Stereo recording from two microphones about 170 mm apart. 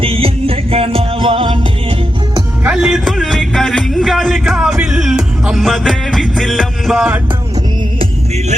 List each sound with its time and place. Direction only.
0.0 s music: 35° right (ahead or behind)
2.6 s music: 5° right (ahead or behind)